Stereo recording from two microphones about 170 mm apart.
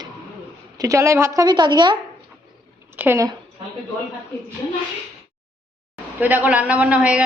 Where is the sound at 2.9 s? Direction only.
10° right (ahead or behind).